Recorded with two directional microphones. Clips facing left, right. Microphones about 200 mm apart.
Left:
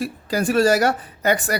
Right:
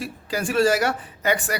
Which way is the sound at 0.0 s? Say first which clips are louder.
Left 5 dB; 40° left (ahead or behind).